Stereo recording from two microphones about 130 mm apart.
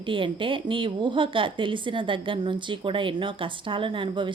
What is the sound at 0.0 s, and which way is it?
A woman's voice, 40° right (ahead or behind).